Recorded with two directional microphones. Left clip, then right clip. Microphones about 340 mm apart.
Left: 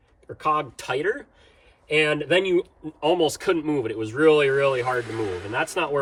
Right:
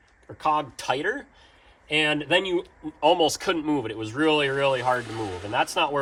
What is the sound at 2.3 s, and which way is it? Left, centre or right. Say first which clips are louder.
Speech: left 2 dB; centre.